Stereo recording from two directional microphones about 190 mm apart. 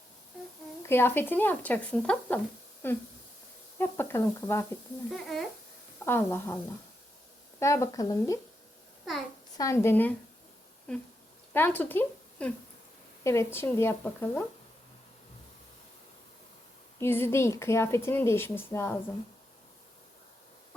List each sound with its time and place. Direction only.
0.8 s a woman's voice: 10° left (ahead or behind)
5.1 s speech: centre (ahead or behind)
6.1 s a woman's voice: 15° left (ahead or behind)
7.6 s a woman's voice: 15° left (ahead or behind)
9.6 s a woman's voice: 15° left (ahead or behind)
11.5 s a woman's voice: 10° left (ahead or behind)
17.0 s a woman's voice: 10° left (ahead or behind)